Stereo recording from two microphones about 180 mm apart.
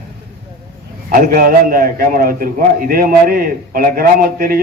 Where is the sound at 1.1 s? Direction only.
50° right (ahead or behind).